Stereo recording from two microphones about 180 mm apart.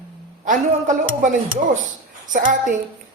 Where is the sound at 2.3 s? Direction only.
50° right (ahead or behind).